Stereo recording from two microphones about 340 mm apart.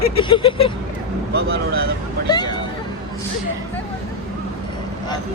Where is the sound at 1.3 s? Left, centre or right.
Right.